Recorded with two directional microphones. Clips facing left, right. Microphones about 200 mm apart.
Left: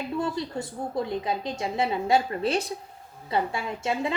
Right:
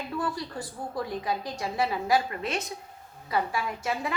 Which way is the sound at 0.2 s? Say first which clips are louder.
Left 3 dB; 25° left (ahead or behind).